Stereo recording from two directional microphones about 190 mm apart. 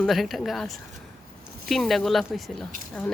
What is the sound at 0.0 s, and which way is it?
Speech, centre (ahead or behind).